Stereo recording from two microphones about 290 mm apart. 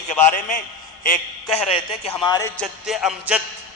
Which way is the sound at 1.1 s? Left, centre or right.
Left.